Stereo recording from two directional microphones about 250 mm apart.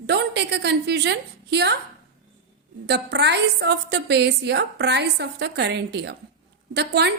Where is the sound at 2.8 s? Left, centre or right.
Right.